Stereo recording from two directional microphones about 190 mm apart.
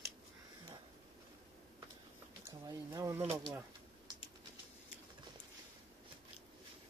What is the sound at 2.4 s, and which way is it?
Speech, 20° right (ahead or behind).